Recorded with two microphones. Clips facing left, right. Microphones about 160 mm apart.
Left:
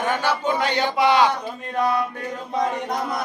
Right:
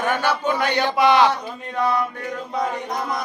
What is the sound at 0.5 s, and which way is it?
Chant, 20° left (ahead or behind).